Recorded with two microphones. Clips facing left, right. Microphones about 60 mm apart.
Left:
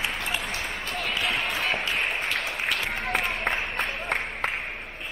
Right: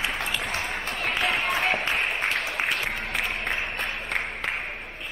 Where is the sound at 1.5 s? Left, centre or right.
Right.